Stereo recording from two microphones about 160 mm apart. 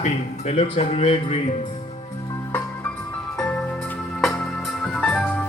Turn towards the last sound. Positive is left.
turn(degrees=5)  # may be behind; listen again after turning